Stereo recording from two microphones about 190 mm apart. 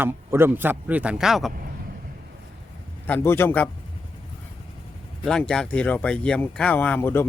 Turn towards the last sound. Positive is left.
turn(degrees=10)  # may be behind; listen again after turning